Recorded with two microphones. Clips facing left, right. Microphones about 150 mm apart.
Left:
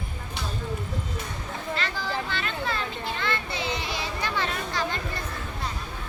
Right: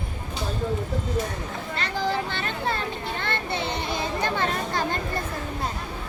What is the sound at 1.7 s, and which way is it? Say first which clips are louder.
Children playing: right 4 dB; 50° right (ahead or behind).